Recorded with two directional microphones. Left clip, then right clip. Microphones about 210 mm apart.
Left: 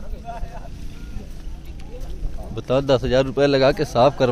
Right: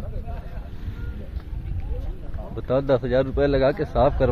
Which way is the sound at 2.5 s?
20° left (ahead or behind).